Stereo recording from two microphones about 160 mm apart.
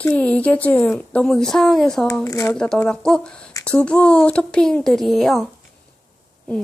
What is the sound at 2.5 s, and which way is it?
Speech, 5° left (ahead or behind).